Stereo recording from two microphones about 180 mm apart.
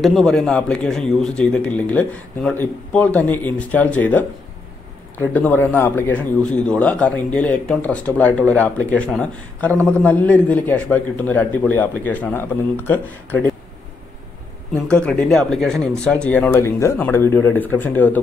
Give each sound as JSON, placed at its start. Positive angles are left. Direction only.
{"t": 0.0, "sound": "a man's voice", "side_deg": 0}
{"t": 14.9, "sound": "a man's voice", "side_deg": 5}